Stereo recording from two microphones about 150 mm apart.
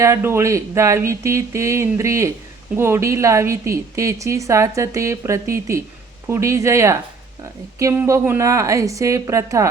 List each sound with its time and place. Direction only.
0.0 s a woman's voice: 15° right (ahead or behind)